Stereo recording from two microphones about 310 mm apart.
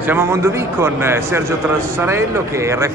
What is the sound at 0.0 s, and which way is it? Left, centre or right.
A man's voice, centre.